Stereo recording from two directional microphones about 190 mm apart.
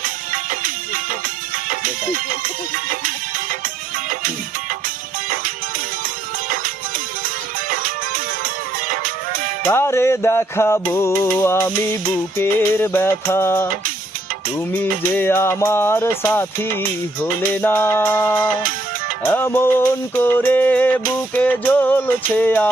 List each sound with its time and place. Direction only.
1.7 s music: 45° right (ahead or behind)
7.7 s music: 45° right (ahead or behind)
9.6 s music: 15° left (ahead or behind)
14.7 s music: 10° left (ahead or behind)
17.5 s music: 10° left (ahead or behind)